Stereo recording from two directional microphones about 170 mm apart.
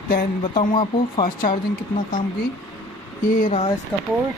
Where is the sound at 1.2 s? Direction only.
55° left (ahead or behind).